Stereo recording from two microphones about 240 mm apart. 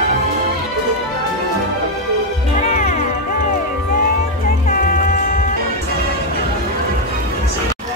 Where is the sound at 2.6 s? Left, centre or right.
Left.